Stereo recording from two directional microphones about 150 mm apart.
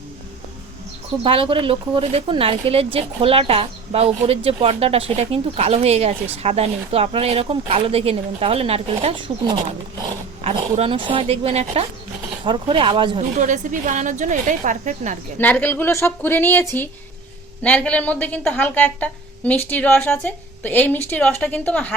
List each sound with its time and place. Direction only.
1.2 s speech: 35° right (ahead or behind)
13.3 s a woman's voice: 55° right (ahead or behind)
15.4 s a woman's voice: 10° left (ahead or behind)